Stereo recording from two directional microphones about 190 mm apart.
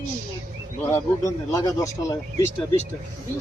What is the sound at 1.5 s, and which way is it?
Speech, 20° left (ahead or behind).